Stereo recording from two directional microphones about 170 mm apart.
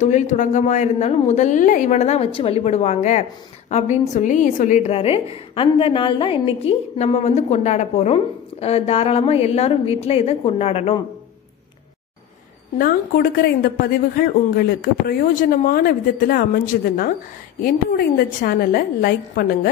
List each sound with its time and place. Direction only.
0.0 s a woman's voice: 45° left (ahead or behind)
12.7 s a woman's voice: 55° left (ahead or behind)